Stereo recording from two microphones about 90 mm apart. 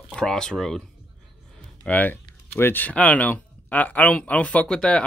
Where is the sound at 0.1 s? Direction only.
5° left (ahead or behind).